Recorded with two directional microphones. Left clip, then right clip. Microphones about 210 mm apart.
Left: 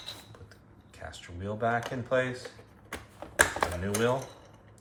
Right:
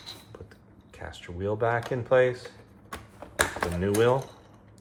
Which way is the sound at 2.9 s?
5° left (ahead or behind).